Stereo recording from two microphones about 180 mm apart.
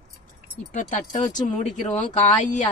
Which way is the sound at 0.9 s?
45° left (ahead or behind).